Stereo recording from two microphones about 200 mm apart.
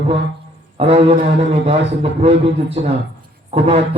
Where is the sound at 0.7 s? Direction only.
30° right (ahead or behind).